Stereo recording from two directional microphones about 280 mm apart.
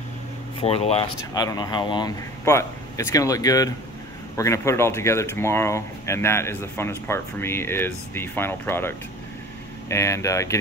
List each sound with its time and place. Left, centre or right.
0.6 s speech: left